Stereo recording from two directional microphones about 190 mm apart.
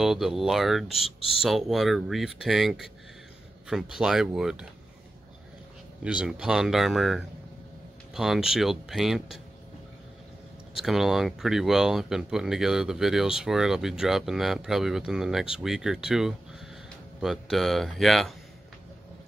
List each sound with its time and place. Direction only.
0.0 s speech: centre (ahead or behind)
6.0 s speech: 5° right (ahead or behind)
10.7 s speech: centre (ahead or behind)